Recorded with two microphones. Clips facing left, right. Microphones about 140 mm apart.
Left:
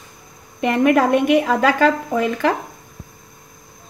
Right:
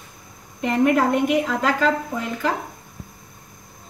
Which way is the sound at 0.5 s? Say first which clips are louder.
Left 3 dB; 75° left (ahead or behind).